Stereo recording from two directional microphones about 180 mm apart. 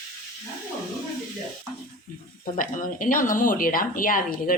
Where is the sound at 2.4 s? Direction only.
50° left (ahead or behind).